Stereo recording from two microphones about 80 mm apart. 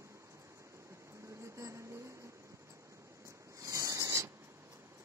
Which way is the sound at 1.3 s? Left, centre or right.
Right.